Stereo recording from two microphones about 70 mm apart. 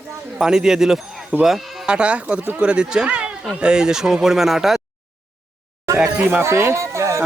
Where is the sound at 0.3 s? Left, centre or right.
Centre.